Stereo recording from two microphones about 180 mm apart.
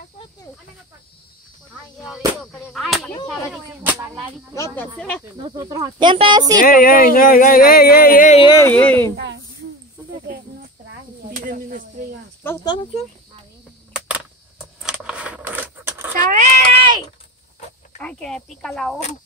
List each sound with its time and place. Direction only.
2.7 s speech: centre (ahead or behind)
4.7 s speech: 10° left (ahead or behind)
5.6 s speech: 20° right (ahead or behind)
6.6 s speech: 50° left (ahead or behind)
8.4 s speech: 25° left (ahead or behind)
8.6 s speech: 10° left (ahead or behind)
9.1 s a sound: 80° right
10.2 s a sound: 60° right (ahead or behind)
12.6 s speech: 25° left (ahead or behind)
13.9 s a sound: 5° right (ahead or behind)
14.8 s keys jangling: 5° right (ahead or behind)
16.1 s cat: 45° right (ahead or behind)
16.7 s a sound: 30° right (ahead or behind)
18.0 s speech: 5° left (ahead or behind)